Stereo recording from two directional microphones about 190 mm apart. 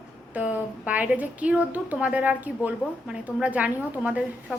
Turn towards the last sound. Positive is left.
turn(degrees=-5)  # may be behind; listen again after turning